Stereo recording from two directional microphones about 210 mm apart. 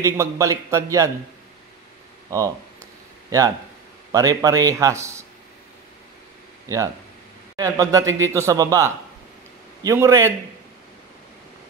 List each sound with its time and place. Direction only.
0.0 s speech: 15° right (ahead or behind)
3.3 s speech: 15° right (ahead or behind)
6.7 s speech: 15° right (ahead or behind)